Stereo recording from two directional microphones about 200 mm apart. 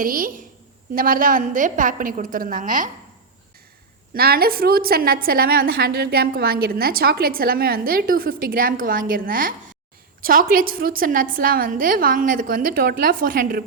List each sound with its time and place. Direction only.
0.0 s a woman's voice: 45° right (ahead or behind)
4.1 s a woman's voice: 50° right (ahead or behind)